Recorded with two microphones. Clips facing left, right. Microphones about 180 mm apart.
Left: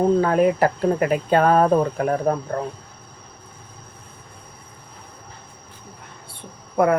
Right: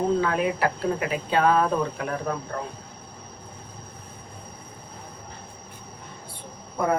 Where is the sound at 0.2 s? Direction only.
45° left (ahead or behind).